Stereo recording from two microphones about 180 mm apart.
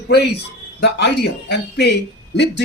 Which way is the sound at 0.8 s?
70° left (ahead or behind).